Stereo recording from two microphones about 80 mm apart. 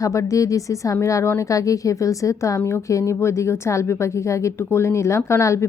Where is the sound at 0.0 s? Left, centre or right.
Left.